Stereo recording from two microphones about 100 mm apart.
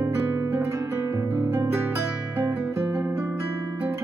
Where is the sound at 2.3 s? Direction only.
20° right (ahead or behind).